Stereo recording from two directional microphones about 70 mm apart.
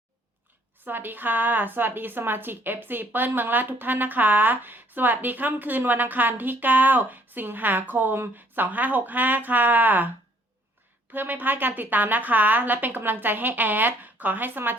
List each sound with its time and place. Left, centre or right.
0.9 s a woman's voice: right
11.1 s a woman's voice: right